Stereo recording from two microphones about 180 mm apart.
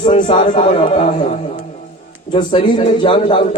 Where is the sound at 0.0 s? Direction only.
30° left (ahead or behind).